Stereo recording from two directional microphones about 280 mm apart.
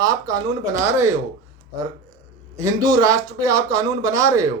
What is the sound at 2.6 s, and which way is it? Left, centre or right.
Speech, centre.